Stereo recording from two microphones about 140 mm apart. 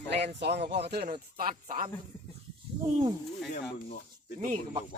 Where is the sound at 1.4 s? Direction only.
80° right.